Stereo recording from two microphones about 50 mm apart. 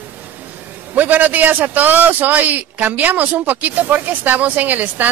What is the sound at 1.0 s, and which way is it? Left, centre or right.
A man's voice, right.